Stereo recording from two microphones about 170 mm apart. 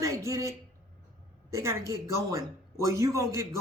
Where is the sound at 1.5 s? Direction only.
15° right (ahead or behind).